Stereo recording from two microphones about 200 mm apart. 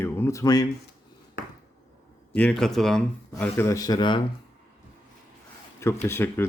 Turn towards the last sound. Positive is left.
turn(degrees=10)  # may be behind; listen again after turning